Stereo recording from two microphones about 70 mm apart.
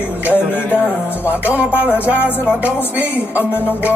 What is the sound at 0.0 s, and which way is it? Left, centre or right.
Music, right.